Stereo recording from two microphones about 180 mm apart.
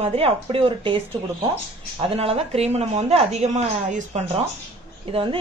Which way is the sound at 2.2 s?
35° right (ahead or behind).